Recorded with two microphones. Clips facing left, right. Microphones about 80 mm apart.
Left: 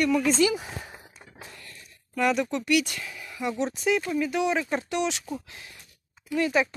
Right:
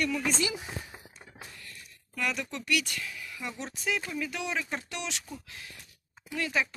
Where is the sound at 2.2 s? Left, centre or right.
Left.